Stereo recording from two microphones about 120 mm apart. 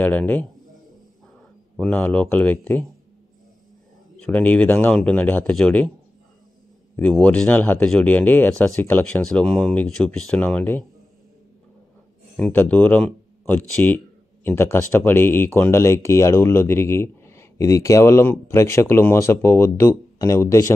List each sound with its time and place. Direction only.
0.0 s speech: 15° left (ahead or behind)
1.8 s speech: 10° left (ahead or behind)
4.2 s speech: 10° left (ahead or behind)
7.0 s speech: 10° left (ahead or behind)
9.2 s speech: 5° left (ahead or behind)
12.4 s speech: 15° left (ahead or behind)